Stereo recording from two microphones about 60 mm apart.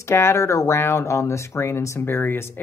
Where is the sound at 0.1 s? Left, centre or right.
Left.